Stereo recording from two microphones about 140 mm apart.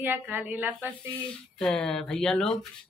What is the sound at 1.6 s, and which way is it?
Speech, 5° left (ahead or behind).